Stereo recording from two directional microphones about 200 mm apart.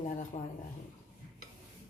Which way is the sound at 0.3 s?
35° left (ahead or behind).